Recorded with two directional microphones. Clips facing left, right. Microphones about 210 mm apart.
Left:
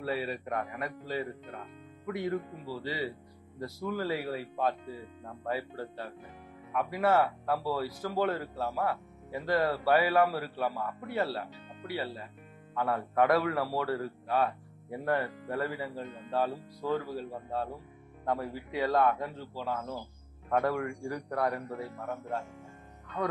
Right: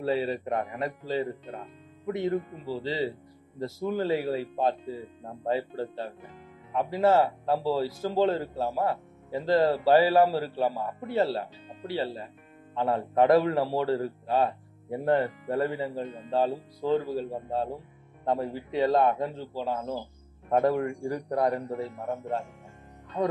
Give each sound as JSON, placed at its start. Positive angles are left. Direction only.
{"t": 0.0, "sound": "speech", "side_deg": -25}